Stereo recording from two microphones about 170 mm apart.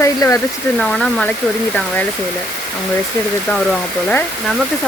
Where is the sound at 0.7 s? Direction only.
5° left (ahead or behind).